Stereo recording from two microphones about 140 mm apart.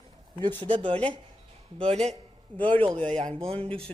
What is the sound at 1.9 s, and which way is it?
Speech, 50° right (ahead or behind).